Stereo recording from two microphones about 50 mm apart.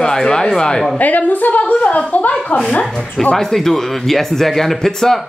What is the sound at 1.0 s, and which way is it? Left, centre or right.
A woman's voice, left.